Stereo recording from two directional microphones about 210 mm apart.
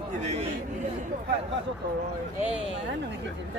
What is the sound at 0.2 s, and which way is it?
Speech, 30° right (ahead or behind).